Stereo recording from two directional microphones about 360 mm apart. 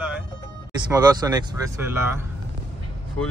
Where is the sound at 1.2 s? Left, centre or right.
Centre.